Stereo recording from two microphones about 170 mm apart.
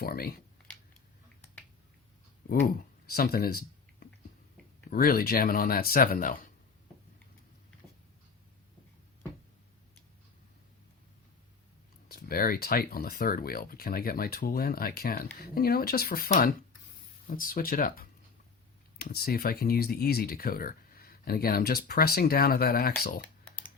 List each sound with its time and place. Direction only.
0.0 s speech: 65° left (ahead or behind)
3.1 s speech: 60° left (ahead or behind)
4.0 s a sound: 65° left (ahead or behind)
4.9 s speech: 60° left (ahead or behind)
12.0 s speech: 60° left (ahead or behind)